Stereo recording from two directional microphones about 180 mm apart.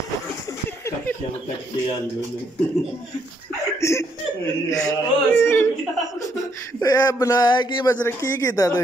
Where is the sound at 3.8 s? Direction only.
15° left (ahead or behind).